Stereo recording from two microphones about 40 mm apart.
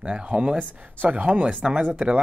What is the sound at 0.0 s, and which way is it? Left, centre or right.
Speech, right.